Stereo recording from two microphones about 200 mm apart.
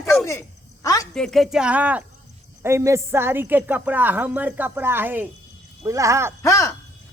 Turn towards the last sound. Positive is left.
turn(degrees=15)  # may be behind; listen again after turning